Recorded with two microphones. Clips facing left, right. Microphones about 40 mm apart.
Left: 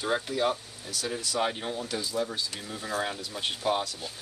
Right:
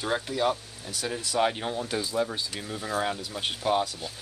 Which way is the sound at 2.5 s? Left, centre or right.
Centre.